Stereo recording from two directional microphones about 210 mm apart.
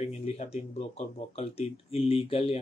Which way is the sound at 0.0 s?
30° left (ahead or behind).